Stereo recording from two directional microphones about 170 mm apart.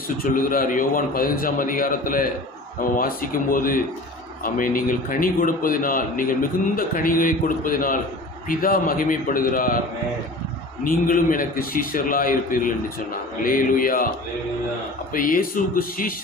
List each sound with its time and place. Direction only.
0.3 s a man's voice: 55° left (ahead or behind)
10.8 s a man's voice: 55° left (ahead or behind)
15.1 s a man's voice: 55° left (ahead or behind)